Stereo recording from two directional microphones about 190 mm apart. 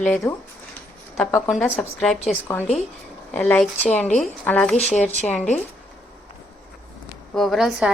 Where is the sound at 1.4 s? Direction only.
Centre (ahead or behind).